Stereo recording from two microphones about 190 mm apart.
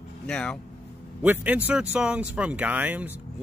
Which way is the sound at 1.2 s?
10° right (ahead or behind).